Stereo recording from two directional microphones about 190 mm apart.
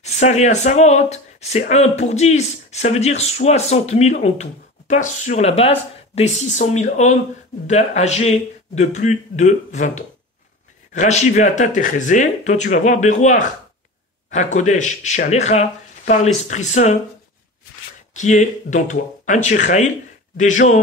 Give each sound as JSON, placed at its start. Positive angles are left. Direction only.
{"t": 0.0, "sound": "speech", "side_deg": 35}
{"t": 18.1, "sound": "speech", "side_deg": 40}